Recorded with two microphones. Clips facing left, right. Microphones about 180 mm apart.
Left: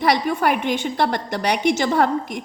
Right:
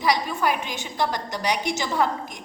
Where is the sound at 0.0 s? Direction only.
60° left (ahead or behind).